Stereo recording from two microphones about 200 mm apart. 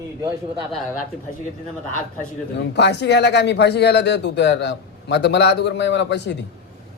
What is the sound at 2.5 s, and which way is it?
Speech, 60° left (ahead or behind).